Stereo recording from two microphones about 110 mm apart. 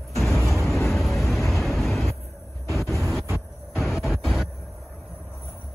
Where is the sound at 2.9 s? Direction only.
Centre (ahead or behind).